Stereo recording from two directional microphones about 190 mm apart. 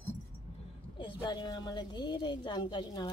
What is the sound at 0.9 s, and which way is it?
A woman's voice, 25° left (ahead or behind).